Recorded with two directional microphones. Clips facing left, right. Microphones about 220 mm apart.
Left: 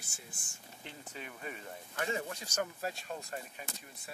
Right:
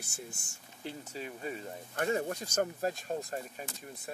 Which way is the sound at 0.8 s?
35° right (ahead or behind).